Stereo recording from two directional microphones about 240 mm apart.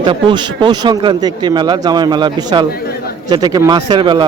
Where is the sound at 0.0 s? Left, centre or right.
Centre.